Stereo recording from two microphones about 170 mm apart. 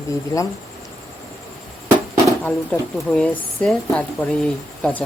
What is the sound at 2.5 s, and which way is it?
Speech, 5° left (ahead or behind).